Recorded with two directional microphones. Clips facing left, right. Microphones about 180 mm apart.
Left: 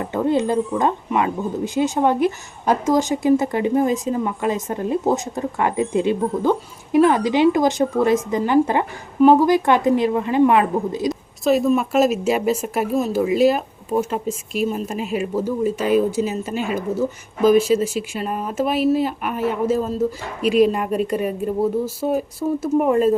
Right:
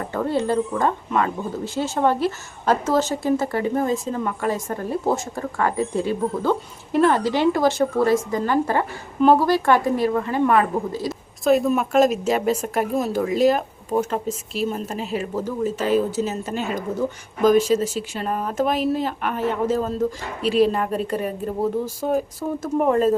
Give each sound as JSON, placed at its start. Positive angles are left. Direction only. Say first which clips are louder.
{"t": 0.0, "sound": "speech", "louder": "left 3 dB", "side_deg": 20}
{"t": 11.1, "sound": "speech", "louder": "right 2 dB", "side_deg": 0}